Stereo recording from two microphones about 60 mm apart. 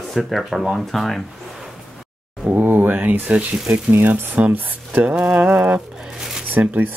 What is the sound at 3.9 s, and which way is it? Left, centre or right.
Speech, right.